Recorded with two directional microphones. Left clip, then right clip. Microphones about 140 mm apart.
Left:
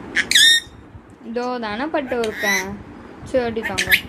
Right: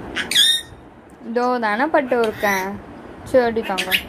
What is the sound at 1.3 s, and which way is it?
Speech, 20° right (ahead or behind).